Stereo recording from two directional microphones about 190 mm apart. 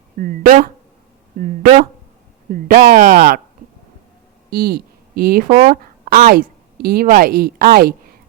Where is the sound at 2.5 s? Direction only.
50° right (ahead or behind).